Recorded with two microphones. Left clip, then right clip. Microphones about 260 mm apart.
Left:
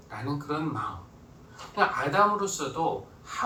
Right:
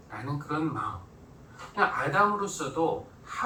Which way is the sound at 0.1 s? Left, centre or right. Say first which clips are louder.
Left 1 dB; left.